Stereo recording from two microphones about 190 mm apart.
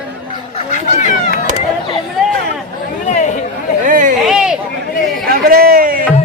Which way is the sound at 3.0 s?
40° left (ahead or behind).